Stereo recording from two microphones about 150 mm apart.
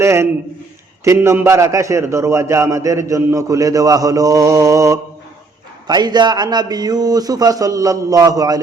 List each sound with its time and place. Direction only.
0.0 s a man's voice: 20° right (ahead or behind)